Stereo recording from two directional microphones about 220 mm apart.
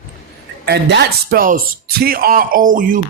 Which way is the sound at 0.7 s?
50° right (ahead or behind).